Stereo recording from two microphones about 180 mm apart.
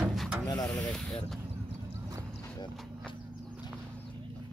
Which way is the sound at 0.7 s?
Centre (ahead or behind).